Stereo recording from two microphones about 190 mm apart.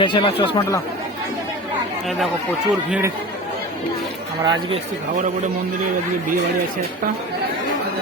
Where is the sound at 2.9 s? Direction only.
15° right (ahead or behind).